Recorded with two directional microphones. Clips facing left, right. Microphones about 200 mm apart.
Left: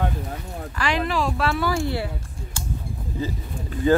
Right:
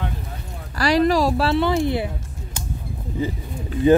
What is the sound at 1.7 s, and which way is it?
Speech, 20° right (ahead or behind).